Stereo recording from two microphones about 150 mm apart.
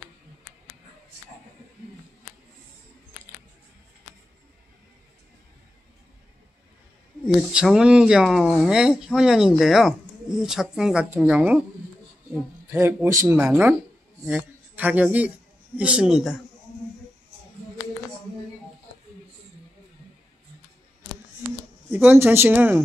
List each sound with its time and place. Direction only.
7.3 s speech: centre (ahead or behind)
12.7 s a man's voice: 20° right (ahead or behind)
13.4 s a man's voice: 5° right (ahead or behind)
21.9 s speech: 15° right (ahead or behind)